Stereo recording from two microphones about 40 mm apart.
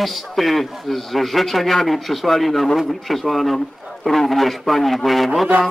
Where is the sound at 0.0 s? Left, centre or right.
Centre.